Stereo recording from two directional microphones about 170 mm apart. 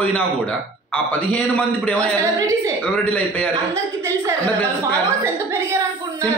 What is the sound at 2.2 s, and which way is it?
Speech, 20° right (ahead or behind).